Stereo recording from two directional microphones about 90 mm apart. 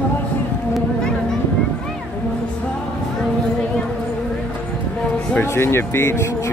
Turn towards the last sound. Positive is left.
turn(degrees=30)  # may be behind; listen again after turning